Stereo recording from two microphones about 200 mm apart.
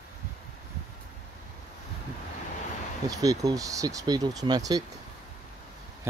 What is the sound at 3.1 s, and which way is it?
Speech, 15° right (ahead or behind).